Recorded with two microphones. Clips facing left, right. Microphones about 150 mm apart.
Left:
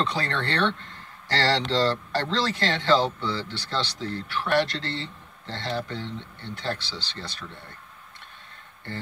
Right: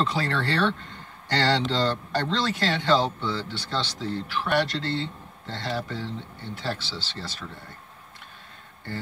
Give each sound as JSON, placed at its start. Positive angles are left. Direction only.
{"t": 0.0, "sound": "speech", "side_deg": -5}